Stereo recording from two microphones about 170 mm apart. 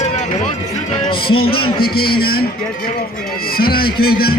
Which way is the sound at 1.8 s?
65° left (ahead or behind).